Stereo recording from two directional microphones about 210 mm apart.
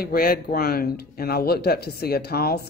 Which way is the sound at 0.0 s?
45° left (ahead or behind).